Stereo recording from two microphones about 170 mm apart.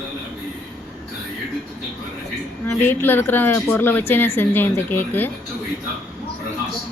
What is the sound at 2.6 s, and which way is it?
A woman's voice, 15° left (ahead or behind).